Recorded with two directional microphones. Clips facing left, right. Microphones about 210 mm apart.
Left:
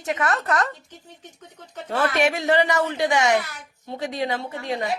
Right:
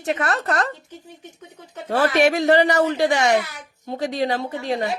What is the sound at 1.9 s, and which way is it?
A man's voice, 35° right (ahead or behind).